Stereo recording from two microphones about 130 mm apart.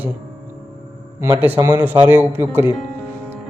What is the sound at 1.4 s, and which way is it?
A man's voice, 15° right (ahead or behind).